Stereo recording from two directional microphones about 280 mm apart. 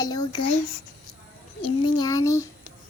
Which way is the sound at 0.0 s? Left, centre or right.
Centre.